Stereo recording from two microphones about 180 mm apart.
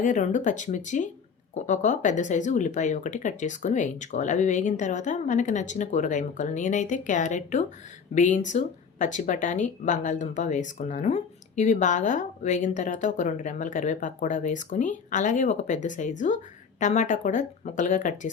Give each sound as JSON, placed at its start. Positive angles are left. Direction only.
{"t": 0.0, "sound": "speech", "side_deg": 45}